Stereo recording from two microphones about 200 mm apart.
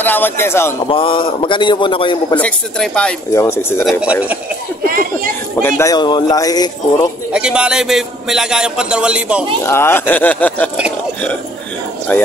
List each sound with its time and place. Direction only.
0.0 s speech: 10° left (ahead or behind)
0.8 s a man's voice: 25° left (ahead or behind)
2.3 s a man's voice: 5° left (ahead or behind)
4.0 s speech: 5° right (ahead or behind)
5.6 s speech: 10° left (ahead or behind)
7.3 s a man's voice: 5° right (ahead or behind)
9.7 s speech: 10° left (ahead or behind)
12.1 s speech: 10° left (ahead or behind)